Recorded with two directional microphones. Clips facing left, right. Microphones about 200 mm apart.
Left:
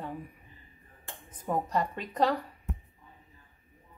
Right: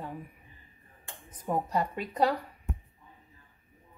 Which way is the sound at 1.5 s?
10° right (ahead or behind).